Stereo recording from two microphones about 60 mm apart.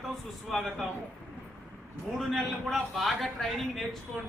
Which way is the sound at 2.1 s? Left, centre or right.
Centre.